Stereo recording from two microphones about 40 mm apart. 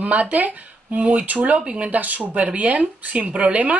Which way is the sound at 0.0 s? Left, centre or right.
Right.